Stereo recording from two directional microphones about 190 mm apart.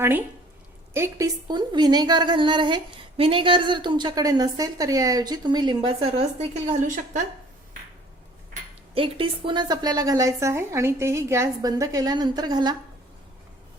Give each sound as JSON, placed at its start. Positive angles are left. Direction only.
{"t": 0.9, "sound": "a woman's voice", "side_deg": -15}
{"t": 6.5, "sound": "a woman's voice", "side_deg": -40}
{"t": 9.0, "sound": "a woman's voice", "side_deg": -25}